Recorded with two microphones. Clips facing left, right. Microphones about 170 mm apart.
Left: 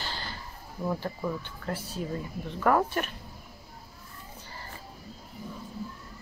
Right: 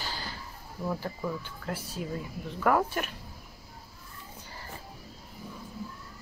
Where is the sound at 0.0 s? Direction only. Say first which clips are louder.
Even; 10° right (ahead or behind).